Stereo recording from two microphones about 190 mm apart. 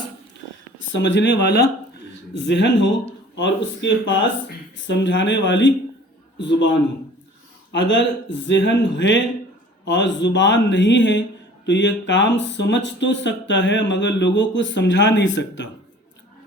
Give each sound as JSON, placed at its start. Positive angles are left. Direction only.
{"t": 0.8, "sound": "speech", "side_deg": 75}
{"t": 7.7, "sound": "speech", "side_deg": 70}